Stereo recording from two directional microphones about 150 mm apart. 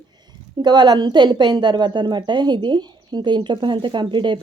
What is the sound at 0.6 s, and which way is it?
A woman's voice, 30° right (ahead or behind).